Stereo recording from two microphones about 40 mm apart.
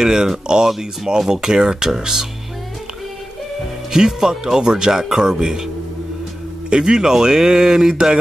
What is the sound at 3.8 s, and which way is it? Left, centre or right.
Speech, centre.